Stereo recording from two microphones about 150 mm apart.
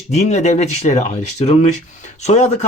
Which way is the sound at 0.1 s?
50° left (ahead or behind).